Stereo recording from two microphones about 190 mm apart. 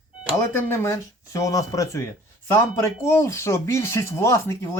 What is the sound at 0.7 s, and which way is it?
Speech, 15° left (ahead or behind).